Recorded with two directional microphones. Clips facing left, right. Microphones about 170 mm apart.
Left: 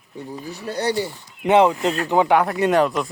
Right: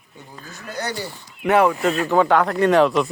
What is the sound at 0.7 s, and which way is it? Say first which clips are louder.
Mechanisms: left 5 dB; 30° left (ahead or behind).